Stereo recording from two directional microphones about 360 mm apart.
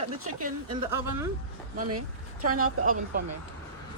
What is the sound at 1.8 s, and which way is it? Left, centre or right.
A woman's voice, right.